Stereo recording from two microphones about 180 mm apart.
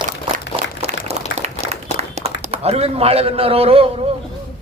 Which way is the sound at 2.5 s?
35° right (ahead or behind).